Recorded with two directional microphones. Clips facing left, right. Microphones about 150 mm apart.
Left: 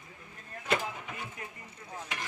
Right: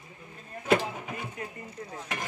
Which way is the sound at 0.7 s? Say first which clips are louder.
Right 5 dB; 35° right (ahead or behind).